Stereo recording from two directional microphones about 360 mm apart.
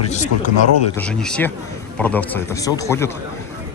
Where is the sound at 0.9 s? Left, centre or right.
Centre.